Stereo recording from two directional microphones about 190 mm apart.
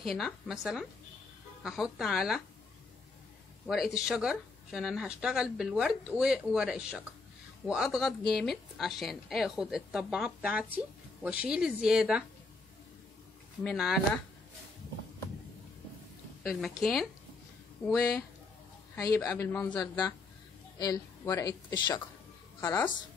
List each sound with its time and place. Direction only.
0.0 s speech: centre (ahead or behind)
3.6 s speech: centre (ahead or behind)
13.7 s speech: centre (ahead or behind)
16.4 s speech: centre (ahead or behind)
18.9 s a man's voice: 15° left (ahead or behind)
19.8 s a man's voice: 20° left (ahead or behind)
22.6 s speech: 10° left (ahead or behind)